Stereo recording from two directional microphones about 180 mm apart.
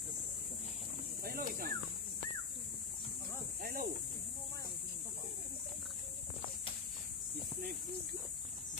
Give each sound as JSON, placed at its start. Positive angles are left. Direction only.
{"t": 1.2, "sound": "speech", "side_deg": -55}
{"t": 3.6, "sound": "cricket", "side_deg": -55}